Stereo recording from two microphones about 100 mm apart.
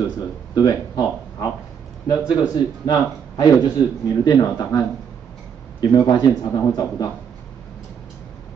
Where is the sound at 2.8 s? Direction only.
40° left (ahead or behind).